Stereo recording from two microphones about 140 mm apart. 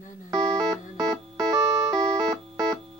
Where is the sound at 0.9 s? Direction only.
25° right (ahead or behind).